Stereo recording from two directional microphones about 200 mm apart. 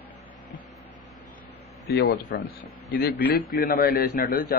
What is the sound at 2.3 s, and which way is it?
Speech, 60° left (ahead or behind).